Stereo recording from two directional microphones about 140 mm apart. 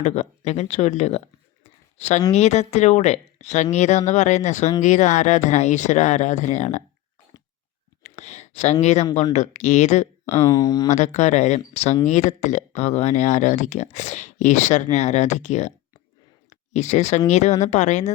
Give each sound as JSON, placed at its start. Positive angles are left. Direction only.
{"t": 0.0, "sound": "speech", "side_deg": 55}
{"t": 1.6, "sound": "a sound", "side_deg": 55}
{"t": 2.3, "sound": "speech", "side_deg": 50}
{"t": 8.0, "sound": "a sound", "side_deg": 55}
{"t": 8.8, "sound": "speech", "side_deg": 55}
{"t": 10.3, "sound": "speech", "side_deg": 25}
{"t": 10.9, "sound": "speech", "side_deg": 60}